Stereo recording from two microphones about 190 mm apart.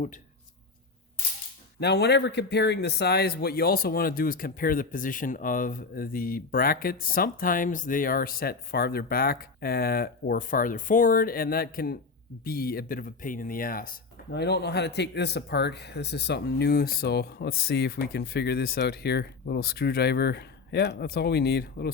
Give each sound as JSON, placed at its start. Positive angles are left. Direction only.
{"t": 1.8, "sound": "speech", "side_deg": 60}